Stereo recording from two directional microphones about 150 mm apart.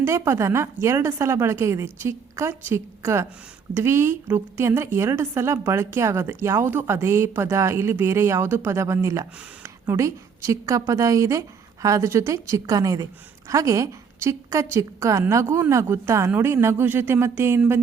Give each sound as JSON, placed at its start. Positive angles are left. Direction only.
{"t": 0.0, "sound": "a woman's voice", "side_deg": -20}